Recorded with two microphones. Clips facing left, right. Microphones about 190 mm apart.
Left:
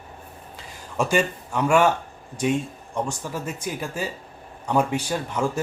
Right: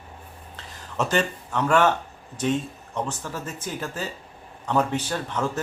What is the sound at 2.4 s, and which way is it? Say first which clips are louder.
Speech: left 1 dB; 10° left (ahead or behind).